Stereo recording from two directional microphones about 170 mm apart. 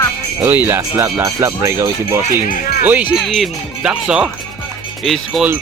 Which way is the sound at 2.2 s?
55° left (ahead or behind).